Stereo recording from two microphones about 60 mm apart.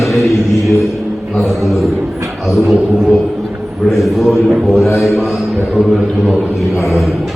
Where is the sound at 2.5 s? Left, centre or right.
Centre.